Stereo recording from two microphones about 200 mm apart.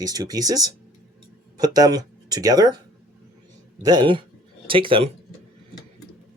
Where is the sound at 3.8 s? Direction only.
20° right (ahead or behind).